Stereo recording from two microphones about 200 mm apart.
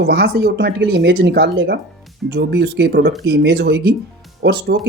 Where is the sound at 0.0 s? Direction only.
55° right (ahead or behind).